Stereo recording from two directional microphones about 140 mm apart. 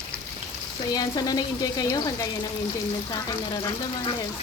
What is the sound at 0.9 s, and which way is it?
Speech, 30° left (ahead or behind).